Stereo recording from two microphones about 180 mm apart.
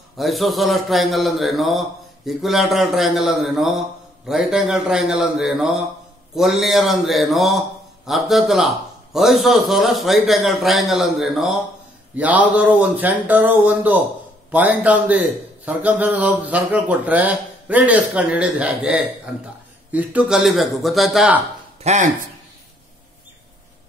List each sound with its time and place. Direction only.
0.2 s a man's voice: centre (ahead or behind)
21.8 s speech: 40° right (ahead or behind)